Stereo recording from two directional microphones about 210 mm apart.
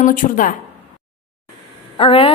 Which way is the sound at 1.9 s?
25° left (ahead or behind).